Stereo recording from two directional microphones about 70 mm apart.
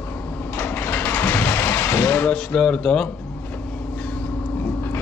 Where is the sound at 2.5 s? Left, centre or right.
Centre.